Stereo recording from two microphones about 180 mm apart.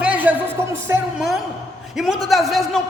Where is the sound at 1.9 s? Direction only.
Centre (ahead or behind).